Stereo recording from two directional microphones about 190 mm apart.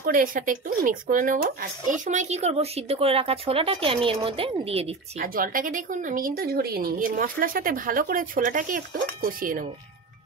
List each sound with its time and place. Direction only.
0.0 s speech: 45° right (ahead or behind)
5.2 s speech: 50° right (ahead or behind)